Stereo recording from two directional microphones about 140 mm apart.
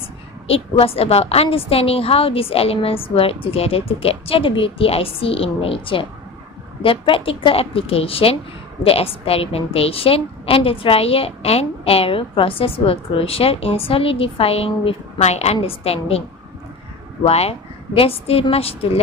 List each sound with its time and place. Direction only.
0.4 s a woman's voice: 45° left (ahead or behind)
17.2 s a woman's voice: 45° left (ahead or behind)